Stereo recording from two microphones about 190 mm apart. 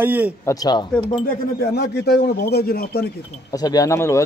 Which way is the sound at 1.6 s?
60° left (ahead or behind).